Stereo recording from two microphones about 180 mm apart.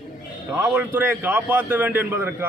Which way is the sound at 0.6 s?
10° right (ahead or behind).